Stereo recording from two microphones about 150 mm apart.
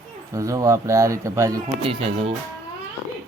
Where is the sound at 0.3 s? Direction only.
20° right (ahead or behind).